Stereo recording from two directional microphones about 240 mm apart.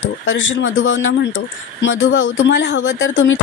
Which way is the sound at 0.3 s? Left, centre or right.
Left.